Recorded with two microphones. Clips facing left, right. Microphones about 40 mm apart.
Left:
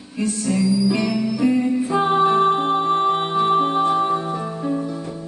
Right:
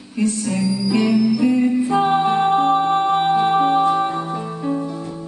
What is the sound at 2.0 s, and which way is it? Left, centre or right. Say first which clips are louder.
Music: left 4 dB; centre.